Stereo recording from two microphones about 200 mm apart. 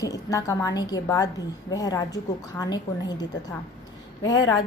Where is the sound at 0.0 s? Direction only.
15° left (ahead or behind).